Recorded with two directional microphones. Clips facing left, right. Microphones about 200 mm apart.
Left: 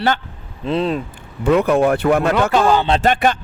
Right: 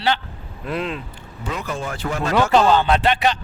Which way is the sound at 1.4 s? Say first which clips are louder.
Left 14 dB; 60° left (ahead or behind).